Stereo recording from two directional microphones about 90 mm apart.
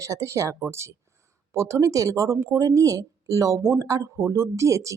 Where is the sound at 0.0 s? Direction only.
35° right (ahead or behind).